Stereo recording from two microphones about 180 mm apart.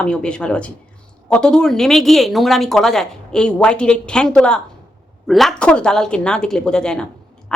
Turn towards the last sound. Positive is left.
turn(degrees=5)  # may be behind; listen again after turning